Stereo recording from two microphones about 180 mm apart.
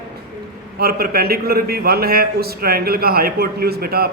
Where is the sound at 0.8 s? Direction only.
55° right (ahead or behind).